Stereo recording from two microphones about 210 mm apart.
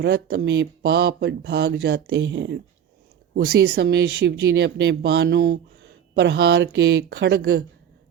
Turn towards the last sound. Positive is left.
turn(degrees=-50)  # may be behind; listen again after turning